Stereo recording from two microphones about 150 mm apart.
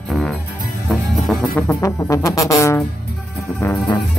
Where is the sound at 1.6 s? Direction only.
15° left (ahead or behind).